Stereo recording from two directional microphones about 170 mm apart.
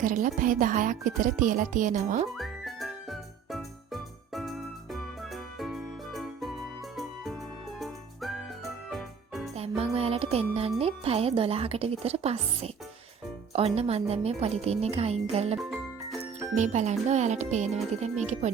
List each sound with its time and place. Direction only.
0.0 s speech: 50° right (ahead or behind)
2.3 s music: centre (ahead or behind)
9.6 s music: 35° right (ahead or behind)
10.8 s a woman's voice: 35° right (ahead or behind)
16.6 s a woman's voice: 45° right (ahead or behind)